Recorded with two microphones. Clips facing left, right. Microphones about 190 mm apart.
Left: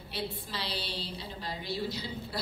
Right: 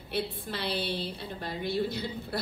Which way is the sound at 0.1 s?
55° right (ahead or behind).